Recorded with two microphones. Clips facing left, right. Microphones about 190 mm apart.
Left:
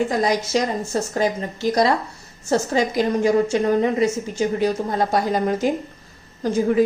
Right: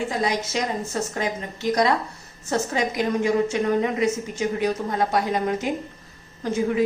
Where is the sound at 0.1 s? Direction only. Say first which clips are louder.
Left 5 dB; 40° left (ahead or behind).